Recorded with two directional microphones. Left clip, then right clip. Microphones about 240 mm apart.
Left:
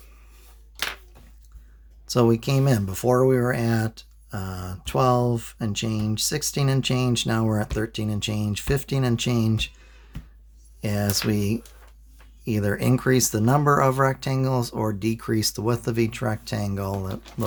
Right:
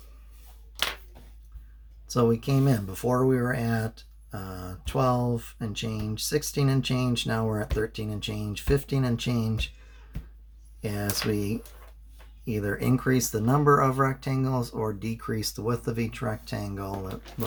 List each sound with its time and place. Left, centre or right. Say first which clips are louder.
2.0 s speech: left 4 dB; left
10.8 s speech: left 5 dB; left